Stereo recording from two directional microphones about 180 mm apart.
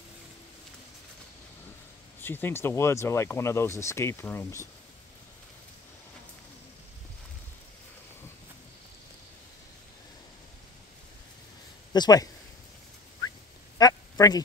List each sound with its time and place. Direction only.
2.2 s speech: 10° left (ahead or behind)
11.9 s speech: 20° left (ahead or behind)
13.7 s quack: 20° left (ahead or behind)